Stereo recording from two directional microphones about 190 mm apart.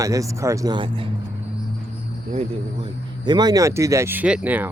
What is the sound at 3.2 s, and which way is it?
Speech, 20° right (ahead or behind).